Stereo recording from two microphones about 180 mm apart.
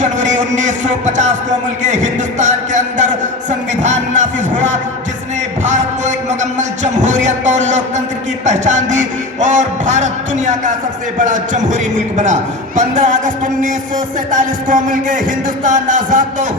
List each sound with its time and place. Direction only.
0.0 s a man's voice: 45° right (ahead or behind)